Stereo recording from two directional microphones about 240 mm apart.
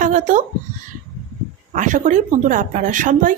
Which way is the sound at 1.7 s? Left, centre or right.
Right.